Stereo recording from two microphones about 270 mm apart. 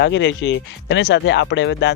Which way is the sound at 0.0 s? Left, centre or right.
Left.